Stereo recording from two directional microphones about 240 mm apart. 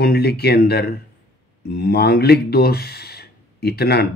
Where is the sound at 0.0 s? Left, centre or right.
Left.